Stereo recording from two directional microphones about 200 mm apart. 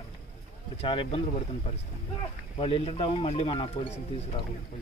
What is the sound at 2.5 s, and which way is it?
Speech, 30° left (ahead or behind).